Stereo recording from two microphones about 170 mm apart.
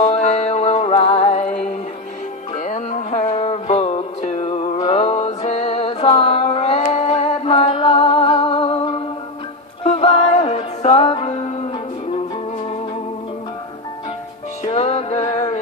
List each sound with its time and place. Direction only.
0.0 s music: 35° left (ahead or behind)
2.6 s music: 45° left (ahead or behind)
14.6 s music: 35° left (ahead or behind)